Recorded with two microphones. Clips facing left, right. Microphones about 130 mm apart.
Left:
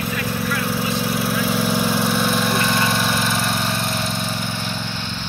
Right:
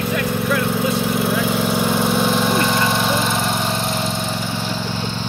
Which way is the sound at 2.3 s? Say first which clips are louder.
Right 2 dB; 20° right (ahead or behind).